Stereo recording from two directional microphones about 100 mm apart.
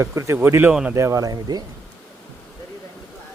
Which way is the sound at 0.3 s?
20° right (ahead or behind).